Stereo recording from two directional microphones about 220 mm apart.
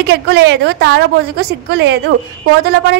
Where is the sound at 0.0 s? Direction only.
50° right (ahead or behind).